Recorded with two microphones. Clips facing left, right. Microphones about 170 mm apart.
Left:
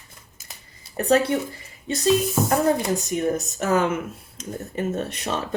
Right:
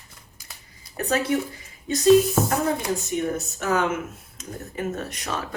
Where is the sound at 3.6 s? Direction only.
35° left (ahead or behind).